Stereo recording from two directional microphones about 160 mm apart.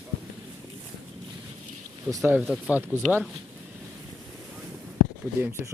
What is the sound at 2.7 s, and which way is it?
Speech, 10° right (ahead or behind).